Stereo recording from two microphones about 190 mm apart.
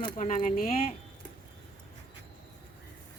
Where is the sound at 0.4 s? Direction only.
45° left (ahead or behind).